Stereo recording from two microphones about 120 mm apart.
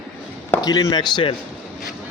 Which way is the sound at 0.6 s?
30° left (ahead or behind).